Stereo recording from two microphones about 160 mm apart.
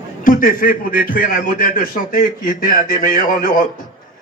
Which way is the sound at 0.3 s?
60° left (ahead or behind).